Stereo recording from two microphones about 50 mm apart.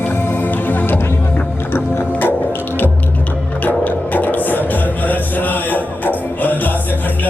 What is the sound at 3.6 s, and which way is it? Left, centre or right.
Music, left.